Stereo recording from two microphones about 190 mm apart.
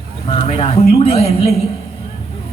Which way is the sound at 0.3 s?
30° left (ahead or behind).